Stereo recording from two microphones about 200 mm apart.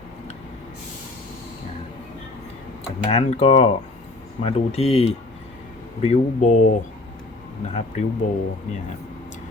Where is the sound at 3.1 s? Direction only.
30° left (ahead or behind).